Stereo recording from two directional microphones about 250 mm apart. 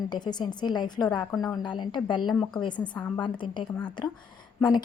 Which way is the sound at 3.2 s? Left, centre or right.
Centre.